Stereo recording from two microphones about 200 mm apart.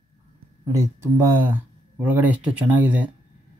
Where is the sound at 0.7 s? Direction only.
15° right (ahead or behind).